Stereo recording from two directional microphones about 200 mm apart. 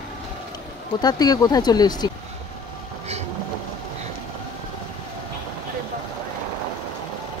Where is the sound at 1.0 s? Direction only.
20° left (ahead or behind).